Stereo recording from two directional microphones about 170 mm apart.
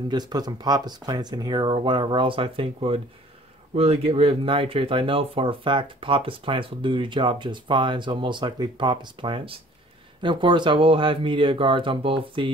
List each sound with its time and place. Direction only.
0.1 s speech: 25° right (ahead or behind)